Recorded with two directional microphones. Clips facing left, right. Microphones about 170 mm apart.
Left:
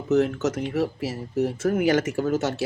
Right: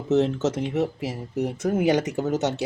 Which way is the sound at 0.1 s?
25° right (ahead or behind).